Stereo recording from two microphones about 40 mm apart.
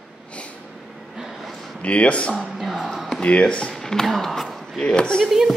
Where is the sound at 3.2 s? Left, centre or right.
Left.